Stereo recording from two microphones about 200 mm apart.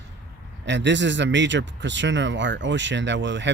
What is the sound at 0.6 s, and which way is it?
Speech, 60° right (ahead or behind).